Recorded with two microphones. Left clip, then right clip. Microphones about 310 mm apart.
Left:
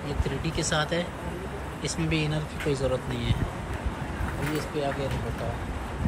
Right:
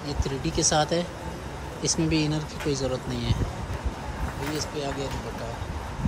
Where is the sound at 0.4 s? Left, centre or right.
Centre.